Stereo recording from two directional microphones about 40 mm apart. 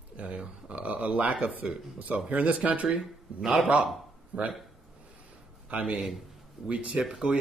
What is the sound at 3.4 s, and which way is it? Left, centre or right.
Speech, centre.